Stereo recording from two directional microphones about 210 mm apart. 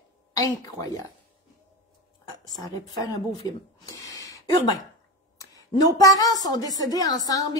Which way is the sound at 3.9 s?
15° left (ahead or behind).